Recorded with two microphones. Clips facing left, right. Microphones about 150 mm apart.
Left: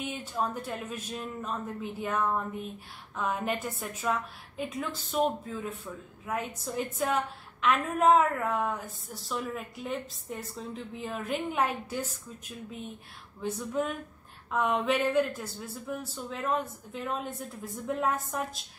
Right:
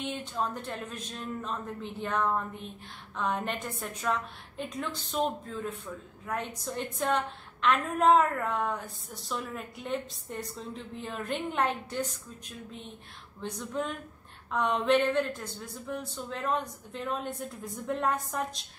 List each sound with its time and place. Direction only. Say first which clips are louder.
0.0 s a woman's voice: even; 10° left (ahead or behind)